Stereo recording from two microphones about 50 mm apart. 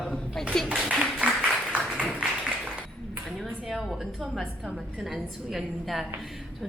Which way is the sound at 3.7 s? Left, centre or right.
Centre.